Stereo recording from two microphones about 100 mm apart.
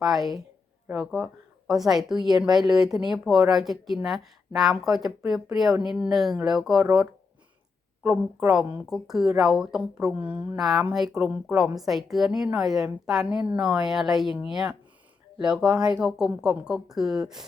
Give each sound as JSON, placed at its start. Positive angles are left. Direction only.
{"t": 0.0, "sound": "a woman's voice", "side_deg": 0}
{"t": 8.0, "sound": "a woman's voice", "side_deg": -20}
{"t": 8.9, "sound": "a woman's voice", "side_deg": -5}
{"t": 10.6, "sound": "a woman's voice", "side_deg": 0}